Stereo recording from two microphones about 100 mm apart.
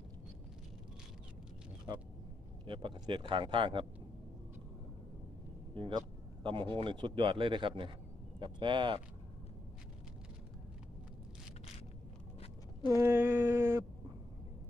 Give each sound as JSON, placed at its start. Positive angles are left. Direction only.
{"t": 2.6, "sound": "a man's voice", "side_deg": -55}
{"t": 5.7, "sound": "a man's voice", "side_deg": -60}
{"t": 12.8, "sound": "a sound", "side_deg": -25}